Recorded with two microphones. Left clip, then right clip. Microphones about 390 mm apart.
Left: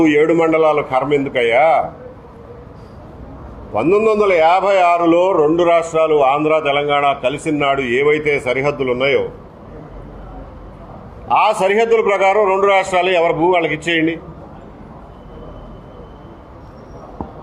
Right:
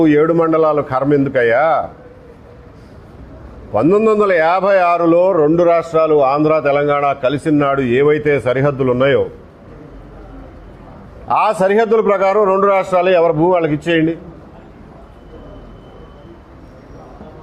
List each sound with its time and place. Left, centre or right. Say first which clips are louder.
0.2 s a man's voice: even; right
3.7 s a man's voice: right 1 dB; right
7.8 s a man's voice: right 2 dB; right
8.2 s a man's voice: right 2 dB; right
11.3 s a man's voice: even; right
13.7 s a man's voice: right 1 dB; right